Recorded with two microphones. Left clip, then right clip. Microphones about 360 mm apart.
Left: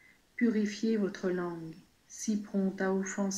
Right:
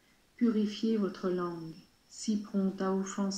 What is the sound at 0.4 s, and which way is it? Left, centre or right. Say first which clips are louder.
Speech: even; centre.